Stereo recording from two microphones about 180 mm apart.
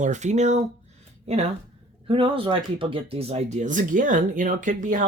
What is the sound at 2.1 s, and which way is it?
Speech, 30° right (ahead or behind).